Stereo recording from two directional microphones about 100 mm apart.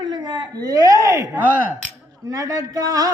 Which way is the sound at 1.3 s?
15° right (ahead or behind).